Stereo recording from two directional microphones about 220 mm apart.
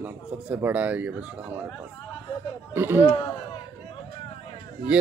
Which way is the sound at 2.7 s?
10° right (ahead or behind).